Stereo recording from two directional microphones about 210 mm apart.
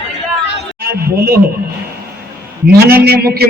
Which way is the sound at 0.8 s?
45° right (ahead or behind).